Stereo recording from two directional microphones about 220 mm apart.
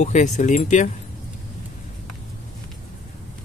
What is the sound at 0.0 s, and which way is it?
Speech, 30° left (ahead or behind).